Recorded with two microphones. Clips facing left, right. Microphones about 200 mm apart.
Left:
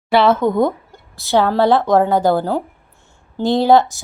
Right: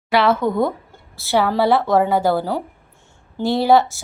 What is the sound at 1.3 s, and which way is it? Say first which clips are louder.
Speech: left 3 dB; 5° right (ahead or behind).